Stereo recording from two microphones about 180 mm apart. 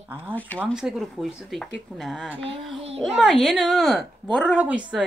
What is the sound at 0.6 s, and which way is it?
A woman's voice, centre (ahead or behind).